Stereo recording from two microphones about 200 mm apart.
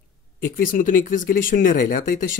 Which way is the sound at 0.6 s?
40° left (ahead or behind).